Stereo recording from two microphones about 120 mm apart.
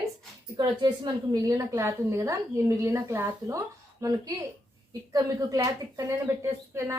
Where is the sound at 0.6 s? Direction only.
40° right (ahead or behind).